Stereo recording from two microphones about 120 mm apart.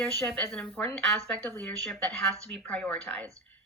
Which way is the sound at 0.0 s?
5° left (ahead or behind).